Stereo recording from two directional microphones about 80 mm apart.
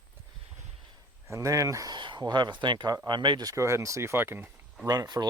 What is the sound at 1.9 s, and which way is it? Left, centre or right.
Speech, right.